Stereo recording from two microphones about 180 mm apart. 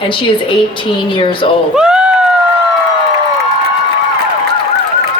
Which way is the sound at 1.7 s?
5° right (ahead or behind).